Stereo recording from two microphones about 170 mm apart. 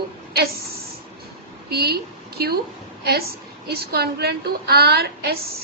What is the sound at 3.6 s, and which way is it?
A woman's voice, 70° right (ahead or behind).